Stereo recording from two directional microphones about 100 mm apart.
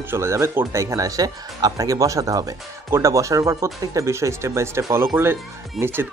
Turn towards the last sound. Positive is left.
turn(degrees=-25)  # may be behind; listen again after turning